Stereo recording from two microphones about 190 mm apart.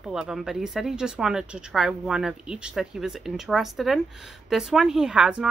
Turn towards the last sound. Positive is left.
turn(degrees=-5)  # may be behind; listen again after turning